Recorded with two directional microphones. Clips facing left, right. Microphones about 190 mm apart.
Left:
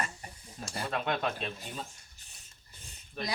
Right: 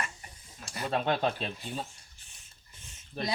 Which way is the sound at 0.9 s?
30° right (ahead or behind).